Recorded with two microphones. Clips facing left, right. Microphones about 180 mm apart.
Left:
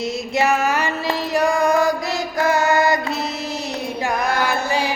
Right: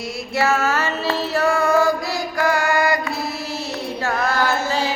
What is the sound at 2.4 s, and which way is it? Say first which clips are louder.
Music: left 2 dB; 20° left (ahead or behind).